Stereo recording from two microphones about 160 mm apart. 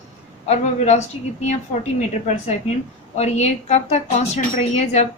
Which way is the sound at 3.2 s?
45° left (ahead or behind).